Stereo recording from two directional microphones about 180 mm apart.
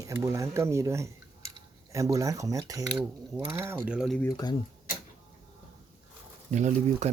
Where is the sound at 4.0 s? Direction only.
Centre (ahead or behind).